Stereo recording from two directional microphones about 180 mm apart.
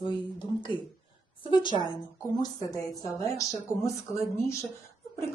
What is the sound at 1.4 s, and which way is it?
Speech, 25° left (ahead or behind).